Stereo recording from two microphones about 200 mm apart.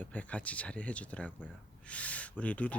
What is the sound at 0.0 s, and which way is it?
Speech, 5° left (ahead or behind).